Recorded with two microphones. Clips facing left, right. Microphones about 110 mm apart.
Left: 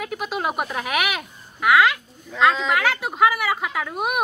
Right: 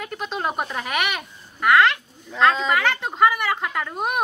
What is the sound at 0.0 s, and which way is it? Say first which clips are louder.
Speech: left 1 dB; 5° left (ahead or behind).